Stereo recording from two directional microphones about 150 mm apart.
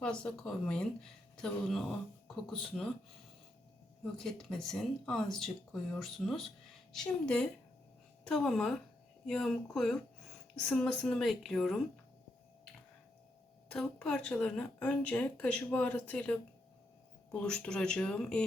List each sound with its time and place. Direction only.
0.0 s speech: 5° left (ahead or behind)
4.2 s speech: 5° left (ahead or behind)
13.7 s speech: 5° left (ahead or behind)
17.4 s speech: 5° left (ahead or behind)